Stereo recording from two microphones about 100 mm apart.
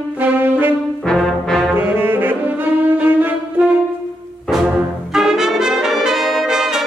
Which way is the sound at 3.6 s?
15° right (ahead or behind).